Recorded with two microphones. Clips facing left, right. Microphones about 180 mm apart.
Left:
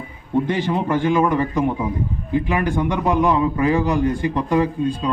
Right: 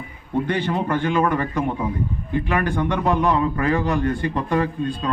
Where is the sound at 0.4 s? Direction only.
15° left (ahead or behind).